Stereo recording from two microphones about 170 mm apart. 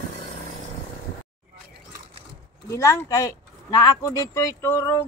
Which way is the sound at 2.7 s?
15° left (ahead or behind).